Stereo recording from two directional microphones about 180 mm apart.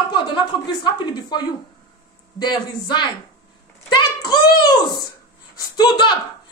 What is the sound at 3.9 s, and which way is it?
Hands, 25° left (ahead or behind).